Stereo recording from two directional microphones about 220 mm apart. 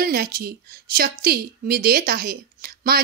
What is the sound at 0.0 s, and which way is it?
A woman's voice, 40° right (ahead or behind).